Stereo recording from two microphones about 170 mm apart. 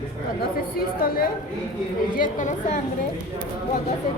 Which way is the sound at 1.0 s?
60° left (ahead or behind).